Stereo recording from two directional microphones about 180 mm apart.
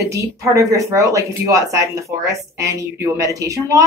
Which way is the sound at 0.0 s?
15° right (ahead or behind).